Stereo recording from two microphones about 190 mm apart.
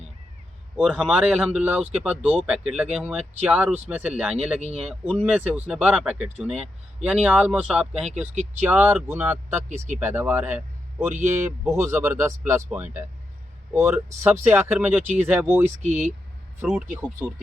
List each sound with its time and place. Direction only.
0.8 s speech: 5° right (ahead or behind)
9.6 s speech: 40° right (ahead or behind)
10.0 s speech: 10° right (ahead or behind)
15.8 s speech: 35° right (ahead or behind)
16.6 s speech: 10° right (ahead or behind)